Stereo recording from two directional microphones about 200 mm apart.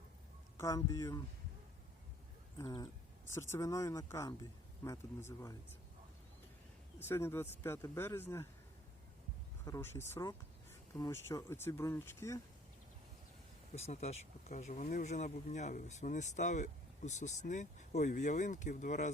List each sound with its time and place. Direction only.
0.6 s speech: 15° left (ahead or behind)
2.6 s speech: 20° left (ahead or behind)
7.0 s speech: 10° left (ahead or behind)
9.6 s speech: 15° left (ahead or behind)
13.7 s speech: 30° left (ahead or behind)